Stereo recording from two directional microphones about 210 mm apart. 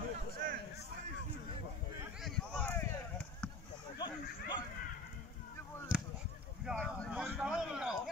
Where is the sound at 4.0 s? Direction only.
20° left (ahead or behind).